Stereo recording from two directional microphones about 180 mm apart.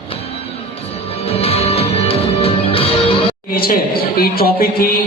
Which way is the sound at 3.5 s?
55° left (ahead or behind).